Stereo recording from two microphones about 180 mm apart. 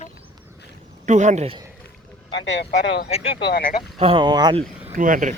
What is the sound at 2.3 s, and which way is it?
Speech, 80° left.